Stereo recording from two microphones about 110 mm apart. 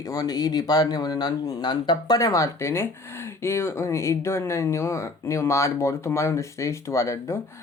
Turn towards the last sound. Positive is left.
turn(degrees=25)  # may be behind; listen again after turning